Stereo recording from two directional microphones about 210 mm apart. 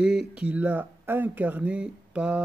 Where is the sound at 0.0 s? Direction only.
5° right (ahead or behind).